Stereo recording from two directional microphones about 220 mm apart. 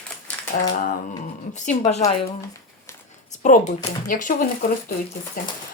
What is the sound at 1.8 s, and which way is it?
Speech, 30° left (ahead or behind).